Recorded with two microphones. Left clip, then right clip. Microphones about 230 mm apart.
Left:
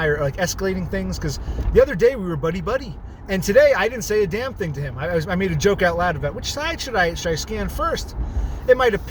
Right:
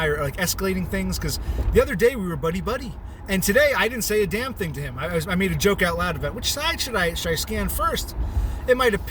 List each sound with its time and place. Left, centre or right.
0.0 s speech: centre